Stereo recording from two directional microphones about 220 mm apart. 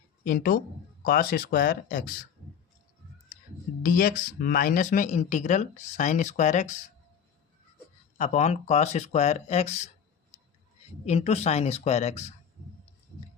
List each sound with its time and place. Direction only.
0.3 s speech: 40° left (ahead or behind)
3.8 s speech: 40° left (ahead or behind)
8.2 s speech: 30° left (ahead or behind)
11.0 s a woman's voice: 30° left (ahead or behind)